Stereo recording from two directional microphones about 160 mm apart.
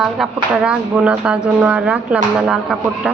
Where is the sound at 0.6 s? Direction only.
5° right (ahead or behind).